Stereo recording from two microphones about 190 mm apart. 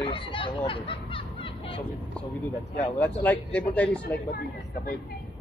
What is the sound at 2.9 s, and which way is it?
Speech, 10° left (ahead or behind).